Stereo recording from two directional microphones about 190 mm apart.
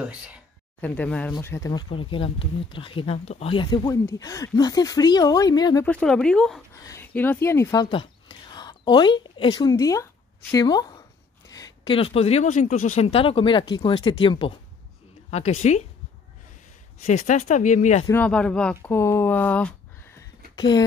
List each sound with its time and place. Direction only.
0.7 s speech: 10° left (ahead or behind)
5.9 s speech: 5° left (ahead or behind)
6.8 s a woman's voice: 15° left (ahead or behind)
15.6 s speech: 35° left (ahead or behind)
17.0 s speech: 40° left (ahead or behind)
18.0 s speech: 10° left (ahead or behind)